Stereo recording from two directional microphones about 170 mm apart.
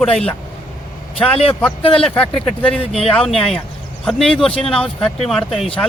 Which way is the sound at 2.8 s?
35° left (ahead or behind).